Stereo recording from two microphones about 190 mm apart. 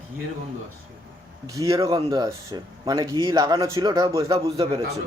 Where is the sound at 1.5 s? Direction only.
20° right (ahead or behind).